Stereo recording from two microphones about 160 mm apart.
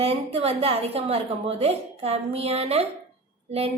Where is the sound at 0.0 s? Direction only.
40° right (ahead or behind).